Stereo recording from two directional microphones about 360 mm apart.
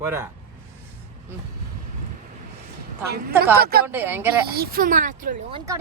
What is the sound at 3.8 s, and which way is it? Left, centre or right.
Speech, centre.